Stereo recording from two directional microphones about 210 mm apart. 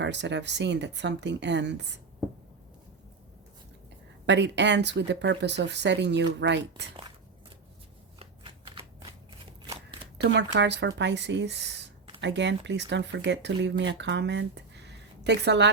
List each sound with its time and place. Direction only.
0.0 s speech: 55° right (ahead or behind)
4.3 s speech: 55° right (ahead or behind)
8.2 s shuffling cards: 25° right (ahead or behind)
10.2 s speech: 55° right (ahead or behind)